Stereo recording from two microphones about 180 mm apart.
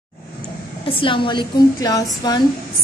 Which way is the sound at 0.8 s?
30° left (ahead or behind).